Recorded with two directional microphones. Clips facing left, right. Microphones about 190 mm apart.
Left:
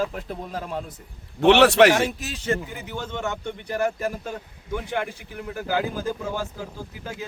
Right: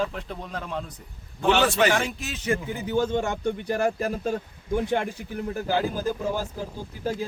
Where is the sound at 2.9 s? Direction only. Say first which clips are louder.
Right 6 dB; 35° right (ahead or behind).